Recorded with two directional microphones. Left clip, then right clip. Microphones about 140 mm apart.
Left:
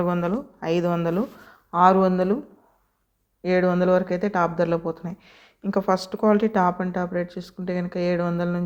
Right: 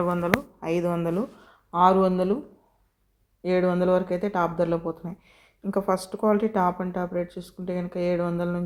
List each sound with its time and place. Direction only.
0.0 s speech: 40° left (ahead or behind)
1.2 s speech: 70° left (ahead or behind)
1.5 s speech: 20° left (ahead or behind)
3.4 s speech: 20° left (ahead or behind)